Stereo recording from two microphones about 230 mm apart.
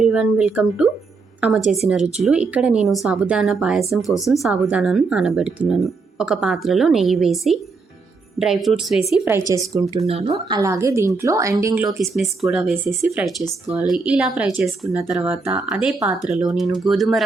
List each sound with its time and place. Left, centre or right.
0.0 s a woman's voice: centre
10.1 s speech: right
10.6 s a woman's voice: centre
11.9 s speech: centre